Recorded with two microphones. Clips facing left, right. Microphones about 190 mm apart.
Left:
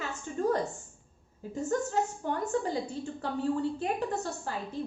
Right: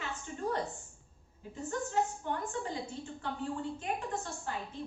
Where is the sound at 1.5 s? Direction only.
40° left (ahead or behind).